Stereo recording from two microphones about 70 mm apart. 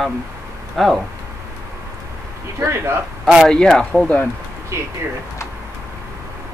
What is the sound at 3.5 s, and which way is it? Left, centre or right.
Speech, centre.